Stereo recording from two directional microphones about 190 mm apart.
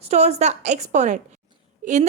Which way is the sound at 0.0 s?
35° right (ahead or behind).